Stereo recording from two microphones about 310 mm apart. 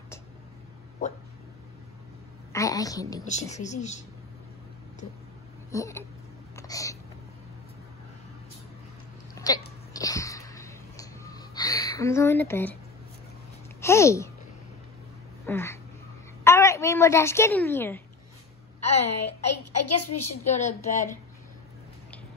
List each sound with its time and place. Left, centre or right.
2.5 s a woman's voice: centre
3.3 s speech: left
5.7 s a sound: centre
9.3 s hiccup: centre
13.7 s a sound: centre
15.4 s a sound: centre
16.4 s speech: centre
19.0 s a child's voice: left
20.4 s speech: left